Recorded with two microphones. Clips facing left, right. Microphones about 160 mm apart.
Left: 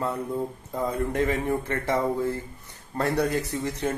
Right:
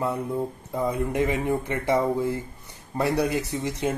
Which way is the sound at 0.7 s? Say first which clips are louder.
Right 1 dB; 15° right (ahead or behind).